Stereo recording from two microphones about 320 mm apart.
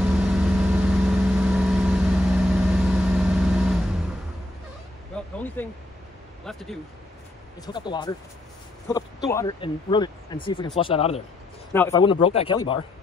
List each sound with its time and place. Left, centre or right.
0.0 s vehicle: centre
5.1 s a sound: centre
6.4 s speech: centre
7.6 s speech: centre